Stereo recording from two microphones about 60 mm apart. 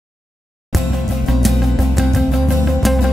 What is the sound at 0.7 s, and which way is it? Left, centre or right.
Music, centre.